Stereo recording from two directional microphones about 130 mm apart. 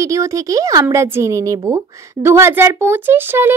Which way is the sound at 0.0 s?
25° right (ahead or behind).